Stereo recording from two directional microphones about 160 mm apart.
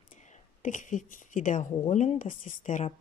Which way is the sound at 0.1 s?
50° left (ahead or behind).